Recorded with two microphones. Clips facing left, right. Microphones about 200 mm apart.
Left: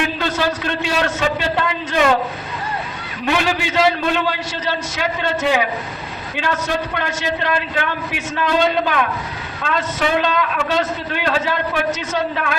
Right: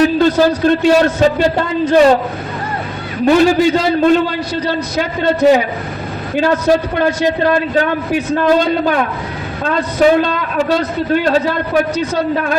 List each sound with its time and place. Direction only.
0.0 s a man's voice: 35° right (ahead or behind)
3.2 s a man's voice: 40° right (ahead or behind)